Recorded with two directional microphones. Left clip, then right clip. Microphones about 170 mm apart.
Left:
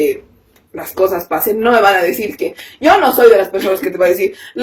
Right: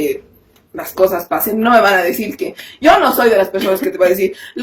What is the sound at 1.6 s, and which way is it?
Speech, 30° right (ahead or behind).